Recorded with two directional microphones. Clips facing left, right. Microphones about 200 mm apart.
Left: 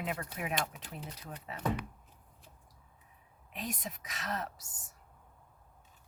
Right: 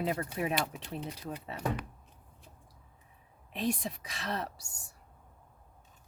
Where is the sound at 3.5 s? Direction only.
30° right (ahead or behind).